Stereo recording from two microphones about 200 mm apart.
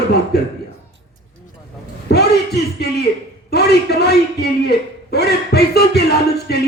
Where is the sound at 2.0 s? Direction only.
55° left (ahead or behind).